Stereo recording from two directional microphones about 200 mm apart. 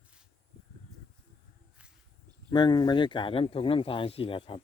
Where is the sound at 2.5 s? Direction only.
20° left (ahead or behind).